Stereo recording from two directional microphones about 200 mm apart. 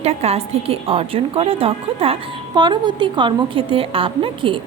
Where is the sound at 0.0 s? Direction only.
30° right (ahead or behind).